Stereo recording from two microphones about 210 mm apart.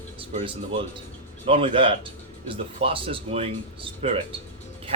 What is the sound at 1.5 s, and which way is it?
Speech, 25° right (ahead or behind).